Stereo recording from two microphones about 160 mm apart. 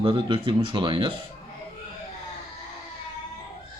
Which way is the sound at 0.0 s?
30° right (ahead or behind).